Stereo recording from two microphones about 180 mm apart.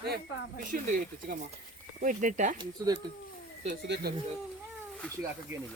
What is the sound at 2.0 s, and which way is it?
Speech, 45° right (ahead or behind).